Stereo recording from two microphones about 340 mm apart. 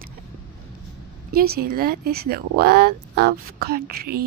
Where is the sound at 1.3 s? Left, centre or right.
Right.